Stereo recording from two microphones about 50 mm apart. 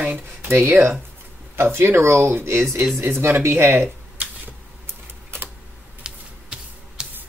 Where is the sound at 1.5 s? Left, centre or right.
Right.